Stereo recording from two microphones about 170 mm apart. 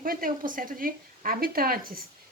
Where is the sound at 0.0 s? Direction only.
55° right (ahead or behind).